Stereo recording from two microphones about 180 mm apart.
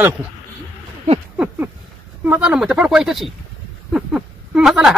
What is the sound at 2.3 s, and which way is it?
Speech, 5° right (ahead or behind).